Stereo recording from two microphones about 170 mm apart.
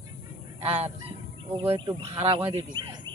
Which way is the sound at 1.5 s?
30° right (ahead or behind).